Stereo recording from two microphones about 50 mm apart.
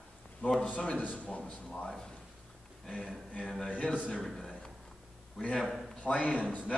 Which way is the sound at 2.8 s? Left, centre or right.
Centre.